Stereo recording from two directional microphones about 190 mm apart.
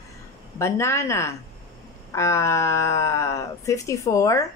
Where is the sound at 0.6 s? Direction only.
15° left (ahead or behind).